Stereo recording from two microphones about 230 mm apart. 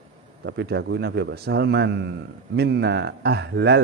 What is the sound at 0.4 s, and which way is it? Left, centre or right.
A man's voice, right.